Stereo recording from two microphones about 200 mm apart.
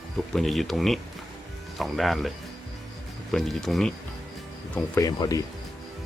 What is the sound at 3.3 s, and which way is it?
Speech, centre (ahead or behind).